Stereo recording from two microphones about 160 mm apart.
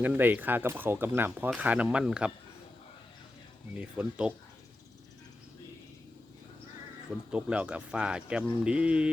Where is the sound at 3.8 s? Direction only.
10° right (ahead or behind).